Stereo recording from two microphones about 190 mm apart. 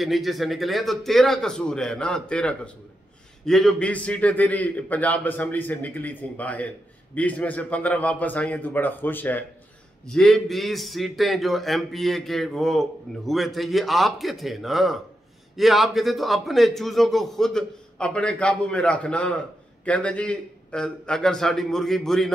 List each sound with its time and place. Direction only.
0.0 s a man's voice: centre (ahead or behind)